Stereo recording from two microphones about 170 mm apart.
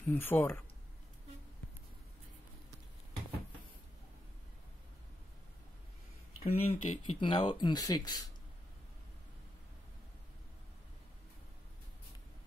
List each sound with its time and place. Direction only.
0.0 s speech: 10° left (ahead or behind)
6.4 s speech: 35° left (ahead or behind)